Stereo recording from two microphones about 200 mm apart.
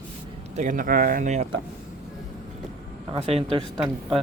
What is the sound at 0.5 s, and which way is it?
Speech, 40° right (ahead or behind).